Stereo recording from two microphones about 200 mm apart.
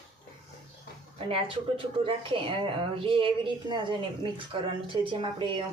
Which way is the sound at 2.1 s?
25° right (ahead or behind).